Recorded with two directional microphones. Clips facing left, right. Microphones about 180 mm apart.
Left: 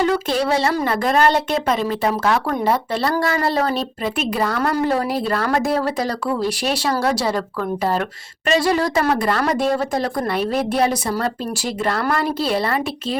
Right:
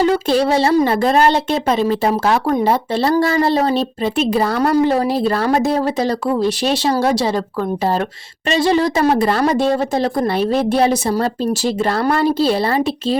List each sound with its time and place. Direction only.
0.0 s speech: 30° right (ahead or behind)